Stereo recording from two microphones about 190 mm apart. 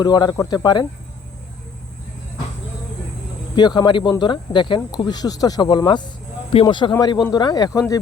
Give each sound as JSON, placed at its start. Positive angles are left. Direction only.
{"t": 0.0, "sound": "speech", "side_deg": 20}
{"t": 3.5, "sound": "speech", "side_deg": 20}